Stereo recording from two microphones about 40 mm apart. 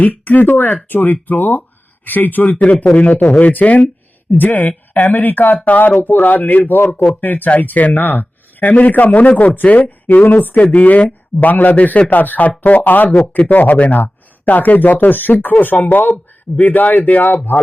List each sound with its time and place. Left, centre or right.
0.3 s speech: left
2.5 s speech: left
6.0 s speech: left
10.2 s speech: left